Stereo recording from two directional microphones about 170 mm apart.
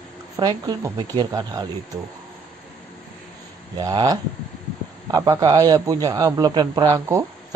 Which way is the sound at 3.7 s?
25° right (ahead or behind).